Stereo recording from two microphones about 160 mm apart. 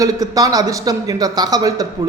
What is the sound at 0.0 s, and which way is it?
A man's voice, 20° right (ahead or behind).